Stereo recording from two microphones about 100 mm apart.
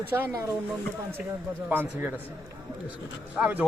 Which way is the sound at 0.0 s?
20° right (ahead or behind).